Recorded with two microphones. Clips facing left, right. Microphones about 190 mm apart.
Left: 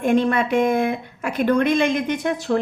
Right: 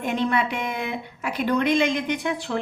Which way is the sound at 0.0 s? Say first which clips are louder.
Left 5 dB; 50° left (ahead or behind).